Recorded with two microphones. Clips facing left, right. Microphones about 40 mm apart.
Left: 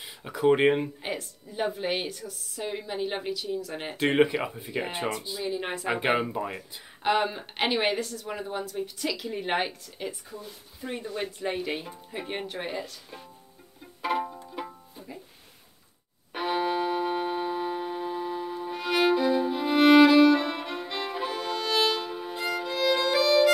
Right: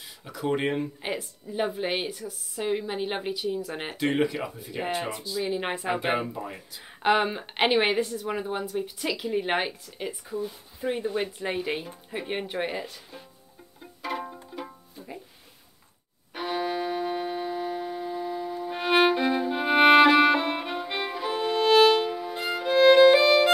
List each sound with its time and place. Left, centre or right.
0.0 s speech: left
1.0 s speech: centre
3.9 s speech: left
5.4 s speech: right
5.9 s speech: centre
7.0 s speech: right
10.9 s speech: right
14.5 s music: centre
16.3 s music: centre
18.7 s violin: right
21.3 s music: right
22.7 s music: right